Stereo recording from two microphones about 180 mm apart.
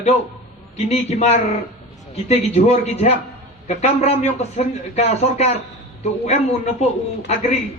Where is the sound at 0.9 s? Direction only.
35° left (ahead or behind).